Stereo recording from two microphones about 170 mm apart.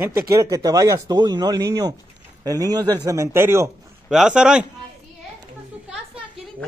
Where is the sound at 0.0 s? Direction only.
15° right (ahead or behind).